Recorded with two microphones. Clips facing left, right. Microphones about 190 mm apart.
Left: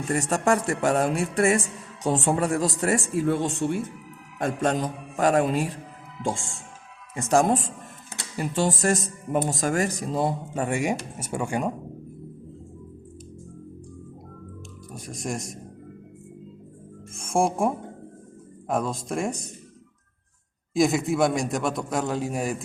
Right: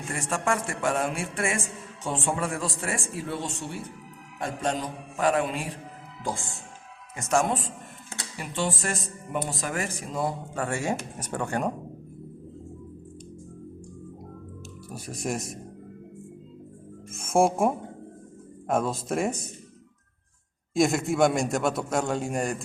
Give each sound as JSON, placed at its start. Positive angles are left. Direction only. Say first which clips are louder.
{"t": 0.1, "sound": "a man's voice", "louder": "left 5 dB", "side_deg": 40}
{"t": 7.2, "sound": "speech", "louder": "left 4 dB", "side_deg": 35}
{"t": 10.5, "sound": "speech", "louder": "left 3 dB", "side_deg": 15}
{"t": 14.9, "sound": "a man's voice", "louder": "right 1 dB", "side_deg": -5}
{"t": 17.1, "sound": "music", "louder": "right 1 dB", "side_deg": -5}
{"t": 18.7, "sound": "a man's voice", "louder": "right 1 dB", "side_deg": 0}
{"t": 20.7, "sound": "a man's voice", "louder": "left 1 dB", "side_deg": 0}